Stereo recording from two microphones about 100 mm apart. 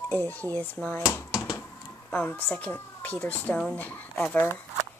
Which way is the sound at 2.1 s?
15° left (ahead or behind).